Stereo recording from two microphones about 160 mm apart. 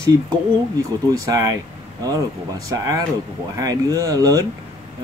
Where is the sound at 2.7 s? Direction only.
20° right (ahead or behind).